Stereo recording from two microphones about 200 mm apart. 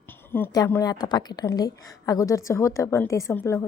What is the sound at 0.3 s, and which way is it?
A woman's voice, 10° left (ahead or behind).